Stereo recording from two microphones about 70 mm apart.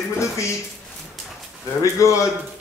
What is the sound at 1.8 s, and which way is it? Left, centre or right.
Speech, left.